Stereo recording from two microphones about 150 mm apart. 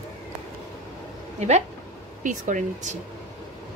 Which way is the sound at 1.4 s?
45° right (ahead or behind).